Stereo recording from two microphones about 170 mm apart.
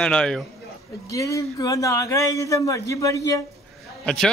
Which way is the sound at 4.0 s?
5° left (ahead or behind).